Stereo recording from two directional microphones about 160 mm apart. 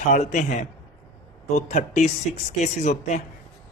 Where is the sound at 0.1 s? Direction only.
50° left (ahead or behind).